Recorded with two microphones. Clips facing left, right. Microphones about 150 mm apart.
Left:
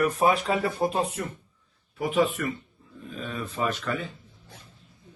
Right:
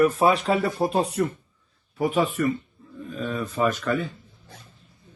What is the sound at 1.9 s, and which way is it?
A man's voice, 40° right (ahead or behind).